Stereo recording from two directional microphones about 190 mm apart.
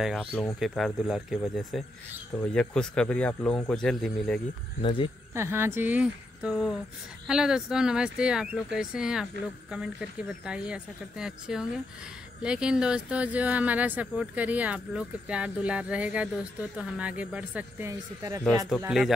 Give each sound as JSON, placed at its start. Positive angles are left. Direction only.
{"t": 0.0, "sound": "speech", "side_deg": 0}
{"t": 4.8, "sound": "speech", "side_deg": 25}
{"t": 5.3, "sound": "speech", "side_deg": -10}
{"t": 18.9, "sound": "speech", "side_deg": 0}